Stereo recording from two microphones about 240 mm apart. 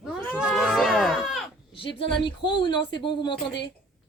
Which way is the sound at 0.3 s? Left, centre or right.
Centre.